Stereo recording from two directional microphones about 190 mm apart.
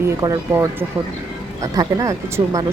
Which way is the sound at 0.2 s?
15° right (ahead or behind).